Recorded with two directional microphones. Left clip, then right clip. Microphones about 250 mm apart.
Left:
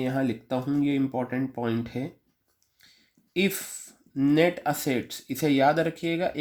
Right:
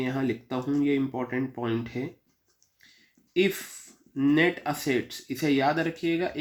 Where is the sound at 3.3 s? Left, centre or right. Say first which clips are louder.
Right 2 dB; left.